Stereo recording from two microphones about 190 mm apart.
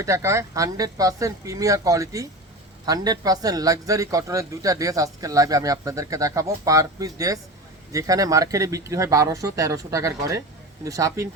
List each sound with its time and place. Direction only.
0.0 s a man's voice: 15° right (ahead or behind)